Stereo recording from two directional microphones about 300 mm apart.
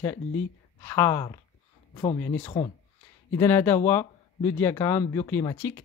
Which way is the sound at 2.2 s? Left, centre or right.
Centre.